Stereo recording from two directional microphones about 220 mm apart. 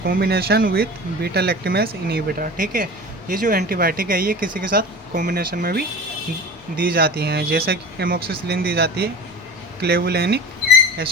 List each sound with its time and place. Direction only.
0.0 s speech: 45° right (ahead or behind)